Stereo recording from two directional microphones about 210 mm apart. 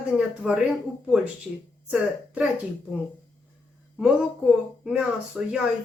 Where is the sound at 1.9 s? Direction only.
Centre (ahead or behind).